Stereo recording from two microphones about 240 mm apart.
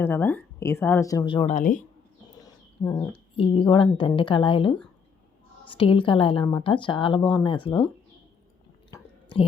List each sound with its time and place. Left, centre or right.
0.0 s a woman's voice: centre; by 1.8 s left
2.4 s a sound: centre
3.3 s a woman's voice: left
8.9 s chewing: left